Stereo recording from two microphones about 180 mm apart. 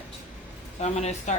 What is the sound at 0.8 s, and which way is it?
Speech, 40° left (ahead or behind).